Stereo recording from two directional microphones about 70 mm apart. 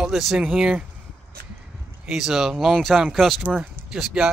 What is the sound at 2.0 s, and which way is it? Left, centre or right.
Speech, centre.